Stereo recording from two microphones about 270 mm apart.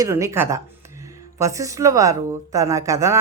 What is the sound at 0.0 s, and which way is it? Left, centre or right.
A woman's voice, centre.